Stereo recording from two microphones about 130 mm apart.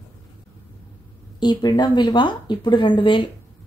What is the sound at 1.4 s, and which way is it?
Speech, 35° left (ahead or behind).